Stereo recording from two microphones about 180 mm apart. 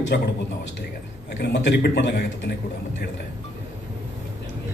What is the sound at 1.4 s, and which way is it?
Speech, 75° left (ahead or behind).